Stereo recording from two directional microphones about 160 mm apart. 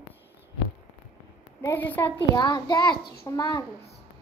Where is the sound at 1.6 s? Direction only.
10° left (ahead or behind).